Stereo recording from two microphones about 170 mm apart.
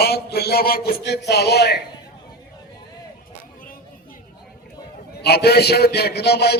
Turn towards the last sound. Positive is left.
turn(degrees=70)  # may be behind; listen again after turning